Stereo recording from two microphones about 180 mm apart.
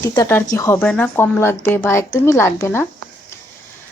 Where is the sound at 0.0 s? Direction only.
15° left (ahead or behind).